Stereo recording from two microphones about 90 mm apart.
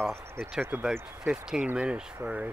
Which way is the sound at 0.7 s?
15° right (ahead or behind).